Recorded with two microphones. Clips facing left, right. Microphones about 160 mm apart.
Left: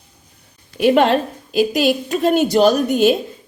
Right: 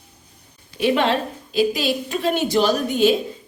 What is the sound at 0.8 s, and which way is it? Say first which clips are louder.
A woman's voice: left 5 dB; 45° left (ahead or behind).